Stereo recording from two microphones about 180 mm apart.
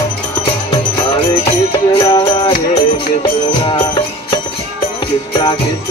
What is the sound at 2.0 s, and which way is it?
Music, 25° left (ahead or behind).